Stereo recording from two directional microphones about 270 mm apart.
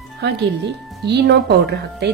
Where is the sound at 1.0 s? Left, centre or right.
Right.